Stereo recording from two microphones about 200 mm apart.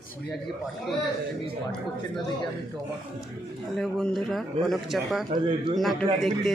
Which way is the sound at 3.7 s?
Centre (ahead or behind).